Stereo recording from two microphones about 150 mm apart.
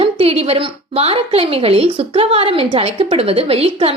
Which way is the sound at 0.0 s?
40° right (ahead or behind).